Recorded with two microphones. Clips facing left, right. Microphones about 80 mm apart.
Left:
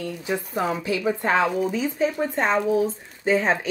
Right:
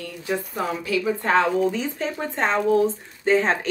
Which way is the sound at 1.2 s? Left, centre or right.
Centre.